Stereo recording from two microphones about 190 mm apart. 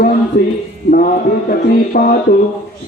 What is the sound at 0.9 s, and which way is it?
Mantra, 50° left (ahead or behind).